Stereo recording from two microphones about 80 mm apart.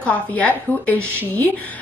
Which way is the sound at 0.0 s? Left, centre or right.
Centre.